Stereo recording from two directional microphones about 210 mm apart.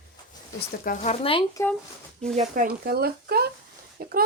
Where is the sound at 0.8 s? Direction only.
35° left (ahead or behind).